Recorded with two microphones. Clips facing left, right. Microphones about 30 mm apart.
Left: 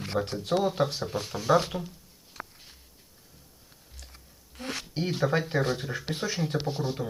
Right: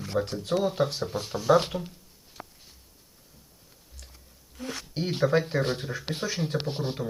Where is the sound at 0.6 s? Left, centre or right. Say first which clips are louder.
Right 1 dB; centre.